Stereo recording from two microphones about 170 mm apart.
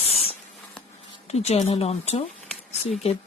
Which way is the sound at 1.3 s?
40° left (ahead or behind).